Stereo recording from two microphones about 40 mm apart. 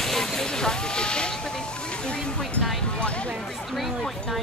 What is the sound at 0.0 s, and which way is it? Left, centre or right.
Vehicle, centre.